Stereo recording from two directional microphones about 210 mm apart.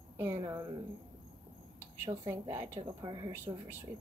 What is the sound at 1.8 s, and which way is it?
A woman's voice, 10° right (ahead or behind).